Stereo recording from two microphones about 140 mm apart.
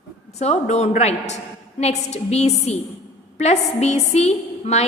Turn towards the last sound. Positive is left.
turn(degrees=50)  # may be behind; listen again after turning